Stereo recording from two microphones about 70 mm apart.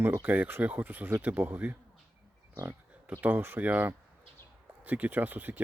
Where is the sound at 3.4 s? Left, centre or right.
Right.